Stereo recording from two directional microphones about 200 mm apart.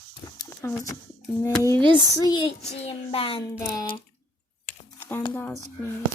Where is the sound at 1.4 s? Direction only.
15° left (ahead or behind).